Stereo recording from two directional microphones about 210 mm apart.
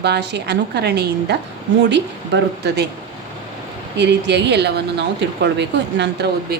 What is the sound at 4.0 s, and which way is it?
A woman's voice, 55° right (ahead or behind).